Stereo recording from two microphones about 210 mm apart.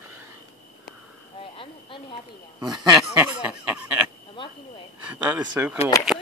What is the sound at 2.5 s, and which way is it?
Speech, 15° right (ahead or behind).